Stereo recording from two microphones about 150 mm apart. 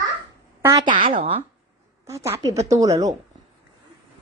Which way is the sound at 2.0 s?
20° right (ahead or behind).